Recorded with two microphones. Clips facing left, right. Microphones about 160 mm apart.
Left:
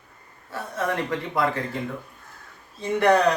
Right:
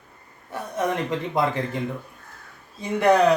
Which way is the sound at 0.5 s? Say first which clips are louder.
Right 2 dB; 20° right (ahead or behind).